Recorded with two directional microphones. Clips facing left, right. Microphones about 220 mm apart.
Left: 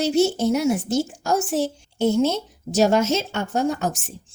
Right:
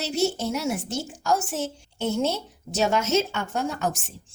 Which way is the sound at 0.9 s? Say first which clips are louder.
Left 4 dB; 40° left (ahead or behind).